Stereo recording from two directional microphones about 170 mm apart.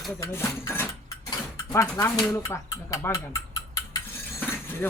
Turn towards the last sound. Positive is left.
turn(degrees=15)  # may be behind; listen again after turning